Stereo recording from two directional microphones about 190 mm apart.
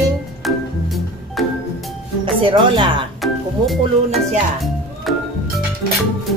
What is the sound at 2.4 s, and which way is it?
Speech, 25° right (ahead or behind).